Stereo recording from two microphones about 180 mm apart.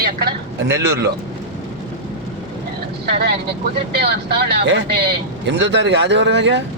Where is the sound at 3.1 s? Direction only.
65° right (ahead or behind).